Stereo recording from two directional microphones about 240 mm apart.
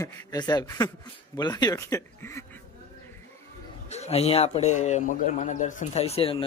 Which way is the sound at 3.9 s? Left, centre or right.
Left.